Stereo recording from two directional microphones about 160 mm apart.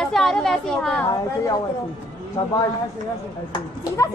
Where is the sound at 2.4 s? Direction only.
30° left (ahead or behind).